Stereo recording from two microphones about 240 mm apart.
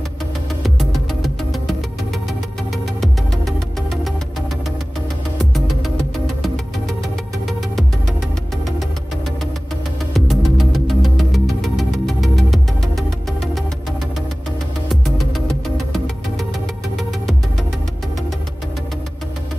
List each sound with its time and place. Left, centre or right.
0.7 s music: centre
3.0 s music: centre
6.2 s music: centre
10.1 s music: centre
14.9 s music: centre